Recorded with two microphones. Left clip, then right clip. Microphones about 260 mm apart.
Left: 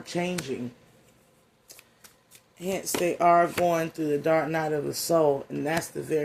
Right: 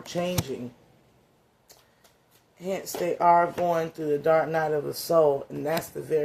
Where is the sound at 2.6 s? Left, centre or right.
Left.